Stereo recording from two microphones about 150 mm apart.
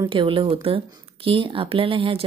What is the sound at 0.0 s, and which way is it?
Speech, 35° right (ahead or behind).